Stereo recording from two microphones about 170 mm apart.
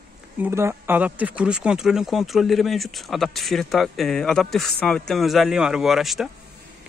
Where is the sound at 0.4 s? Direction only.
15° right (ahead or behind).